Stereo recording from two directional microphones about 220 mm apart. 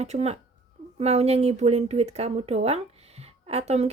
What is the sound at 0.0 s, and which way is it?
Speech, 30° right (ahead or behind).